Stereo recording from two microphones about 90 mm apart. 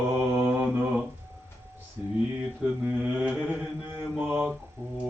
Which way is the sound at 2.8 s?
15° right (ahead or behind).